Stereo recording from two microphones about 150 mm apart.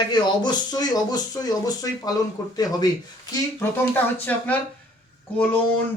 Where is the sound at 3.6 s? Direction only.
10° left (ahead or behind).